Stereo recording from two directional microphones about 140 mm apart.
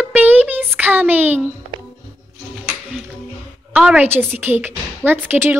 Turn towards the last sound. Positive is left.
turn(degrees=-15)  # may be behind; listen again after turning